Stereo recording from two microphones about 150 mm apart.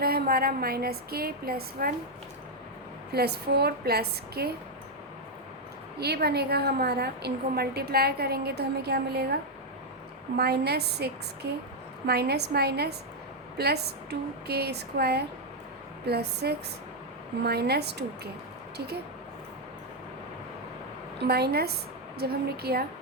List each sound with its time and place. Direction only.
0.0 s a woman's voice: 90° right
3.1 s a woman's voice: 90° right
6.0 s a woman's voice: 90° right
10.3 s a woman's voice: 90° right
21.2 s a woman's voice: 90° right